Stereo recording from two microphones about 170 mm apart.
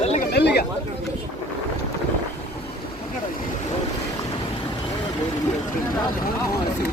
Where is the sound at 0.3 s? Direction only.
75° left (ahead or behind).